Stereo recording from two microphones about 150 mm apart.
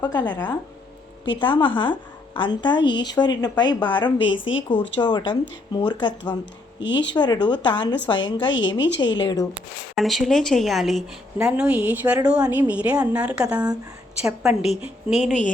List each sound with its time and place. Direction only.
0.0 s a woman's voice: 30° left (ahead or behind)
9.9 s a woman's voice: centre (ahead or behind)